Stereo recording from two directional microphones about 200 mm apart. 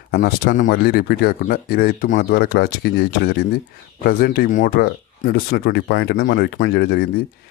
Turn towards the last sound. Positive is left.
turn(degrees=55)  # may be behind; listen again after turning